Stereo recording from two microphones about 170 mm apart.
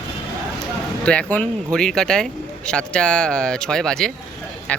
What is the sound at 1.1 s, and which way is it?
Speech, 5° left (ahead or behind).